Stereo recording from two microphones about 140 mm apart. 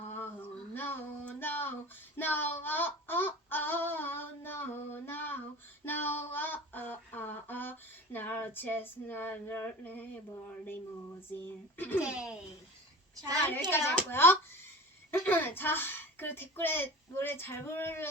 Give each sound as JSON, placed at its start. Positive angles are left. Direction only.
{"t": 0.0, "sound": "a sound", "side_deg": 15}
{"t": 2.1, "sound": "child singing", "side_deg": 15}
{"t": 5.8, "sound": "a sound", "side_deg": 15}
{"t": 11.4, "sound": "speech", "side_deg": 15}
{"t": 12.0, "sound": "a child's voice", "side_deg": -5}
{"t": 13.7, "sound": "a child's voice", "side_deg": 15}